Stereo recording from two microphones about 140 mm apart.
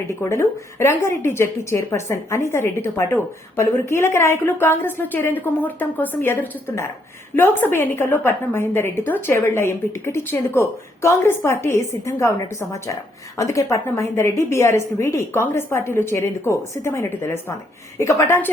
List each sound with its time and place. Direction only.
0.2 s a woman's voice: 20° left (ahead or behind)